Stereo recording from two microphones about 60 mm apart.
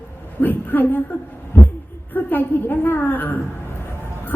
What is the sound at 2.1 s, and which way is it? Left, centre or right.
A woman's voice, left.